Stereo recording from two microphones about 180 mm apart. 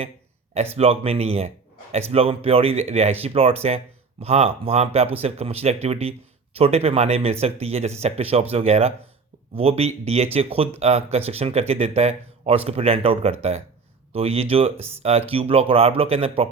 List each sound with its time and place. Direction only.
0.5 s speech: 35° right (ahead or behind)